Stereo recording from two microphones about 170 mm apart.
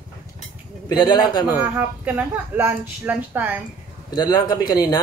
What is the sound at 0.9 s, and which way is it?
Speech, 25° left (ahead or behind).